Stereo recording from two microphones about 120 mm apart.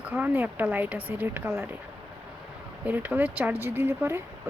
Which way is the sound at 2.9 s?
15° right (ahead or behind).